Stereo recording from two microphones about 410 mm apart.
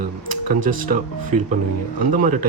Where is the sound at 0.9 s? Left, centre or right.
Centre.